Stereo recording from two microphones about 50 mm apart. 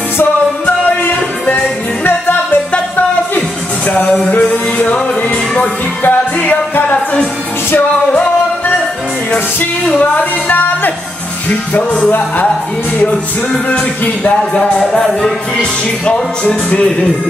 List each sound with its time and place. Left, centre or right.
0.7 s music: left
3.9 s music: left
6.0 s music: left
9.9 s speech: left
13.7 s music: left
16.1 s music: left